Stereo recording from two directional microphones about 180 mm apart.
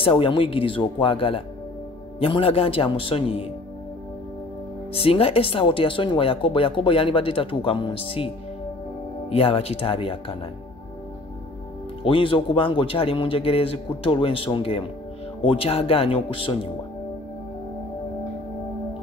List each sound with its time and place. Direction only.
0.0 s a man's voice: 30° left (ahead or behind)
4.9 s speech: 30° left (ahead or behind)
9.3 s a man's voice: 30° left (ahead or behind)
12.0 s a man's voice: 30° left (ahead or behind)